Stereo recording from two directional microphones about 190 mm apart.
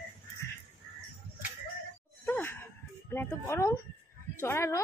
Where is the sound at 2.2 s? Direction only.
10° left (ahead or behind).